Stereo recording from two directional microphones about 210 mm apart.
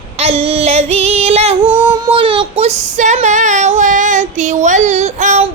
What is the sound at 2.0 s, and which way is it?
Female singing, 25° right (ahead or behind).